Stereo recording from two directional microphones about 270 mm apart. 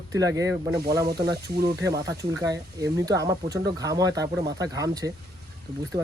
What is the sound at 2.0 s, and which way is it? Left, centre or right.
Speech, centre.